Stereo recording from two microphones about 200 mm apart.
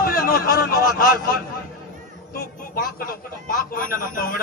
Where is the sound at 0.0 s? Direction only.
45° left (ahead or behind).